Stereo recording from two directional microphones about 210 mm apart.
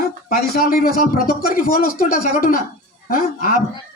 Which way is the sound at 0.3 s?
45° left (ahead or behind).